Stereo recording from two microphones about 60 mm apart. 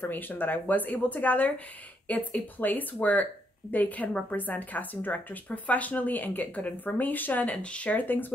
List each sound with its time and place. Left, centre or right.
0.0 s speech: left
7.5 s speech: centre